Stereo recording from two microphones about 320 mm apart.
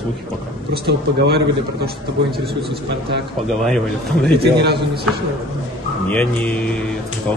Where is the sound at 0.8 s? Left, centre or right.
Right.